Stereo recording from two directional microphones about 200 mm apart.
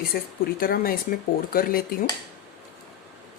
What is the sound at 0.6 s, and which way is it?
Speech, 45° left (ahead or behind).